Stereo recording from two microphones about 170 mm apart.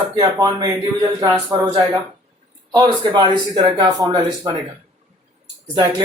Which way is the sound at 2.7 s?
25° right (ahead or behind).